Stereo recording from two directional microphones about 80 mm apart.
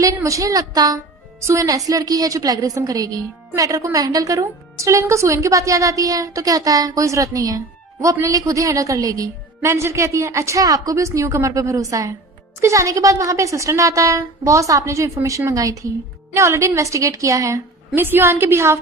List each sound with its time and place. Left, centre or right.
0.0 s a woman's voice: right
1.4 s a woman's voice: right
9.6 s a woman's voice: right
17.9 s a woman's voice: right